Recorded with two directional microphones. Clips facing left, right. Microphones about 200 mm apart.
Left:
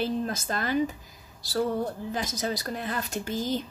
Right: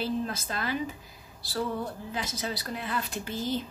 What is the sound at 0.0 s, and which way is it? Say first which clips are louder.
A woman's voice: left 2 dB; 45° left (ahead or behind).